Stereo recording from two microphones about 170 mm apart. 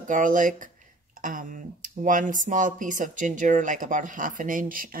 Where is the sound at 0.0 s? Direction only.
50° right (ahead or behind).